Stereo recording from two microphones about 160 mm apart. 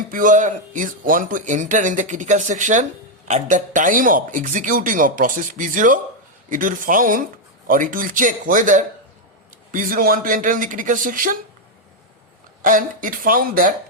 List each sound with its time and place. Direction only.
0.1 s speech: 55° right (ahead or behind)
12.6 s speech: 55° right (ahead or behind)